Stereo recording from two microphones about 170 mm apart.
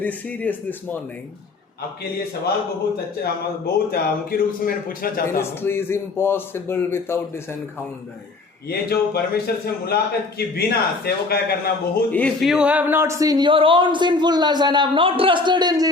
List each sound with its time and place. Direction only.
0.0 s a man's voice: 10° left (ahead or behind)
3.9 s a man's voice: 60° left (ahead or behind)
5.4 s a man's voice: 15° left (ahead or behind)
8.7 s a man's voice: 65° left (ahead or behind)
12.1 s speech: 5° left (ahead or behind); by 15.9 s 25° right (ahead or behind)